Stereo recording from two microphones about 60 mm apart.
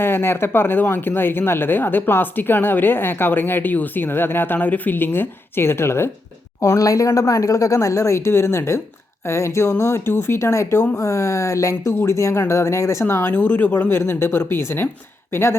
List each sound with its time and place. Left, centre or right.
0.0 s speech: left
6.6 s speech: left
13.3 s speech: left
13.9 s speech: left